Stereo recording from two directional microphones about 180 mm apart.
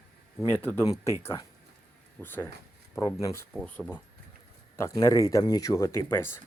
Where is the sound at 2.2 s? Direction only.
10° left (ahead or behind).